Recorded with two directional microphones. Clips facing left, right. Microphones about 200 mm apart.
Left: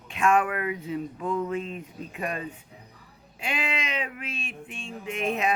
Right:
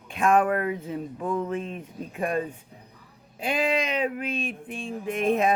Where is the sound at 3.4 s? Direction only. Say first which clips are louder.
Right 6 dB; 40° right (ahead or behind).